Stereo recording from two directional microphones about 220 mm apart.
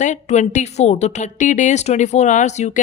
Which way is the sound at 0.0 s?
35° left (ahead or behind).